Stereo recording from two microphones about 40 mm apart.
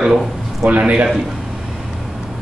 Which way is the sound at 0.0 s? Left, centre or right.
Centre.